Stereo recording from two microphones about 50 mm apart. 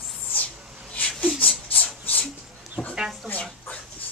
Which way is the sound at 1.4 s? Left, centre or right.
Left.